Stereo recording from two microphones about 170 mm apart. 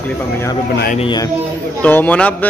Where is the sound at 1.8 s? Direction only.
10° left (ahead or behind).